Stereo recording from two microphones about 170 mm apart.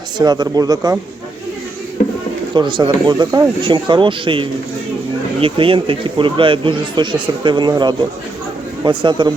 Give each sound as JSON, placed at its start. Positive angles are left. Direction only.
{"t": 0.2, "sound": "speech", "side_deg": -25}
{"t": 2.0, "sound": "a sound", "side_deg": 50}
{"t": 2.6, "sound": "speech", "side_deg": -25}